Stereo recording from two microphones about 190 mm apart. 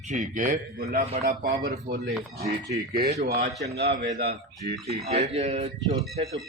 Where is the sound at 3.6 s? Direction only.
65° right (ahead or behind).